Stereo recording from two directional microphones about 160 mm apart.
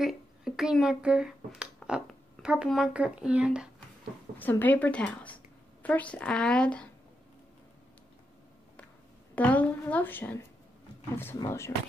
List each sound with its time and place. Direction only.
0.0 s speech: centre (ahead or behind)
4.4 s a woman's voice: 10° left (ahead or behind)
9.3 s a woman's voice: 10° left (ahead or behind)